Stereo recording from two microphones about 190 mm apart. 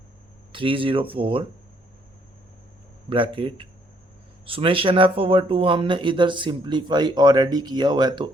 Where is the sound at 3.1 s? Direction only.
25° right (ahead or behind).